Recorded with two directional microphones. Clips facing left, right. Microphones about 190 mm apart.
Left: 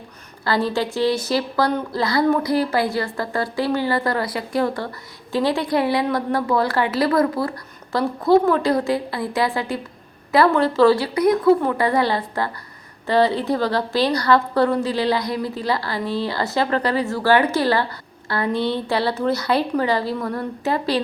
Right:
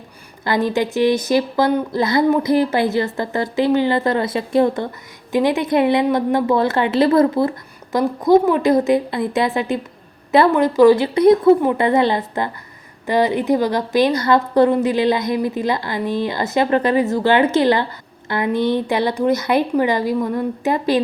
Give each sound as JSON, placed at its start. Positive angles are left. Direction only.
{"t": 0.4, "sound": "a woman's voice", "side_deg": -20}